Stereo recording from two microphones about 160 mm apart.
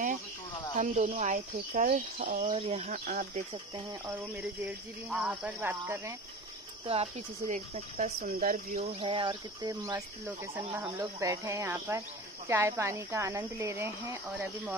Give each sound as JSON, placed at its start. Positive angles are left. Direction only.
{"t": 0.7, "sound": "speech", "side_deg": -50}
{"t": 2.5, "sound": "speech", "side_deg": -40}
{"t": 3.1, "sound": "speech", "side_deg": -55}
{"t": 3.5, "sound": "speech", "side_deg": -30}
{"t": 4.1, "sound": "speech", "side_deg": -10}
{"t": 6.9, "sound": "speech", "side_deg": -45}
{"t": 8.7, "sound": "speech", "side_deg": -35}